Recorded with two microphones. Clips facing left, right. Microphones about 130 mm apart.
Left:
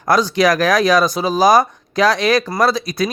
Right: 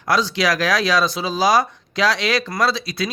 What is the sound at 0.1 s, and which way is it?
Speech, 45° left (ahead or behind).